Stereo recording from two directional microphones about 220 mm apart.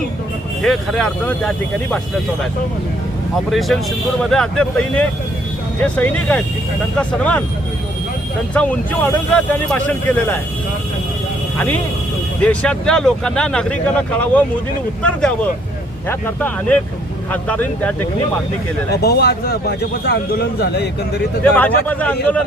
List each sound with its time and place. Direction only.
0.6 s speech: centre (ahead or behind)
3.5 s speech: centre (ahead or behind)
8.5 s speech: 5° left (ahead or behind)
12.4 s speech: 5° left (ahead or behind)
19.0 s speech: 45° left (ahead or behind)
21.4 s speech: 5° left (ahead or behind)